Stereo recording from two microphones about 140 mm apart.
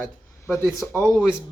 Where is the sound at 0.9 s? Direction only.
20° right (ahead or behind).